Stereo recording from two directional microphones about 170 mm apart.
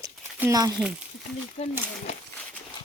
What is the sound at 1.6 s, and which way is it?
Speech, 40° left (ahead or behind).